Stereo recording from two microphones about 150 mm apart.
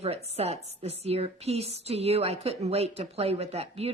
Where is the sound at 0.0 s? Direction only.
45° right (ahead or behind).